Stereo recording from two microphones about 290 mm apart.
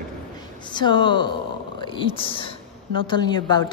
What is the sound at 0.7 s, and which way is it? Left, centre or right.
A woman's voice, centre.